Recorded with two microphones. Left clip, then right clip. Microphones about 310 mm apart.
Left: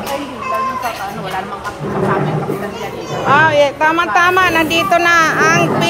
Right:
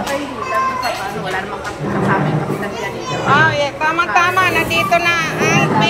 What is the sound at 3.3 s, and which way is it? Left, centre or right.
Speech, left.